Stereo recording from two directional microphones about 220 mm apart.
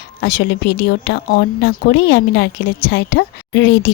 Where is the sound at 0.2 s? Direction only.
45° left (ahead or behind).